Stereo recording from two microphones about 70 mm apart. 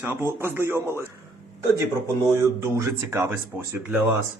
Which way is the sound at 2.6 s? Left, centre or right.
Right.